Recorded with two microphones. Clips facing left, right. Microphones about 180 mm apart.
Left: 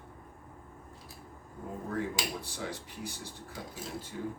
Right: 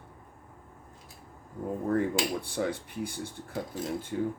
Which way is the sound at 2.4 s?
55° right (ahead or behind).